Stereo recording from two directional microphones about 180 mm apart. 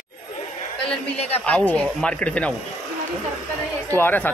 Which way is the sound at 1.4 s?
5° left (ahead or behind).